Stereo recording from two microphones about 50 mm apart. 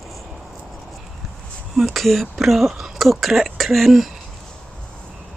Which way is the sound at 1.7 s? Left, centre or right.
Centre.